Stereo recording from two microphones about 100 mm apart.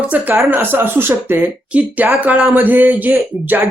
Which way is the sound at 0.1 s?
20° right (ahead or behind).